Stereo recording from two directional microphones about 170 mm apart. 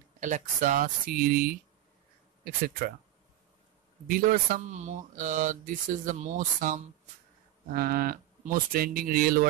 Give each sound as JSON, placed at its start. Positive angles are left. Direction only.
{"t": 0.2, "sound": "speech", "side_deg": -50}
{"t": 4.1, "sound": "speech", "side_deg": -55}
{"t": 7.7, "sound": "speech", "side_deg": -60}